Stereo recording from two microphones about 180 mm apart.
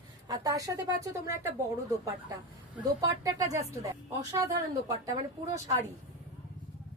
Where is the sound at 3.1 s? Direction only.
20° right (ahead or behind).